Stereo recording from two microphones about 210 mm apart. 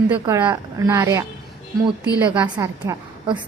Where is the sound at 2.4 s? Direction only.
15° right (ahead or behind).